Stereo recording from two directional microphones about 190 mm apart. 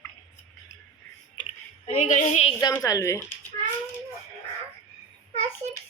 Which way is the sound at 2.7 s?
15° left (ahead or behind).